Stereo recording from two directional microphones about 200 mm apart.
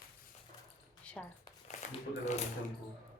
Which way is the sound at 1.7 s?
35° left (ahead or behind).